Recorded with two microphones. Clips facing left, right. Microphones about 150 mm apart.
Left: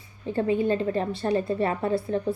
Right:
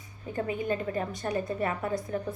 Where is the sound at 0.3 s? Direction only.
30° left (ahead or behind).